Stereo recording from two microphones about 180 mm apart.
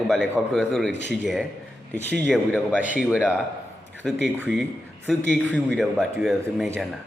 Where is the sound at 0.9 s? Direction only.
80° left.